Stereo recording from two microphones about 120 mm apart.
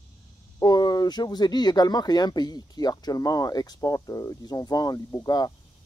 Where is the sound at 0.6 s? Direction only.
35° left (ahead or behind).